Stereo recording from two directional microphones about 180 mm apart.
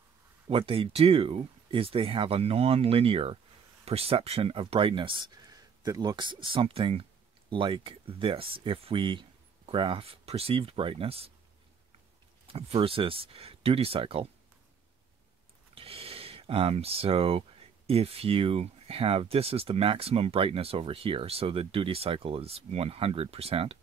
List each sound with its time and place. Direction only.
0.5 s speech: 30° right (ahead or behind)
12.4 s speech: 30° right (ahead or behind)
15.7 s speech: 30° right (ahead or behind)